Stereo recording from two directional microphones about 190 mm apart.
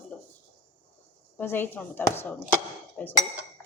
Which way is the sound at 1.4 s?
10° left (ahead or behind).